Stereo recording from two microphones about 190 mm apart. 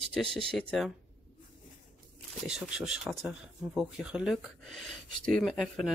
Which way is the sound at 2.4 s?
5° right (ahead or behind).